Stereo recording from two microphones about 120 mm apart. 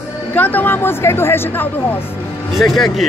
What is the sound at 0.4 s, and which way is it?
A woman's voice, 15° left (ahead or behind).